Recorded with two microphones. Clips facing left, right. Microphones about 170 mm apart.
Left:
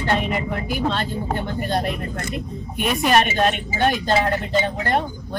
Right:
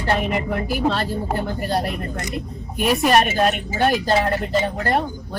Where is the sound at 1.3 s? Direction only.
40° right (ahead or behind).